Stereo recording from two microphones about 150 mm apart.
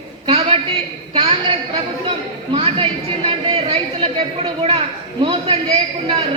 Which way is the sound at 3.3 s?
35° right (ahead or behind).